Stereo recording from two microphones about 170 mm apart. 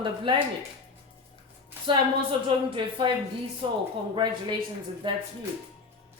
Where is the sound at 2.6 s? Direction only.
30° right (ahead or behind).